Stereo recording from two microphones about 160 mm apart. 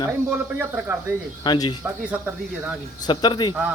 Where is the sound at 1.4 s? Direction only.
30° left (ahead or behind).